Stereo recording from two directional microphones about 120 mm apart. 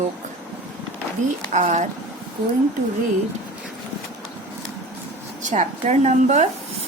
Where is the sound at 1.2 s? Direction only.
90° right.